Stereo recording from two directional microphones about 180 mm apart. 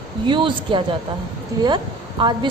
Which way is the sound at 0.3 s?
25° right (ahead or behind).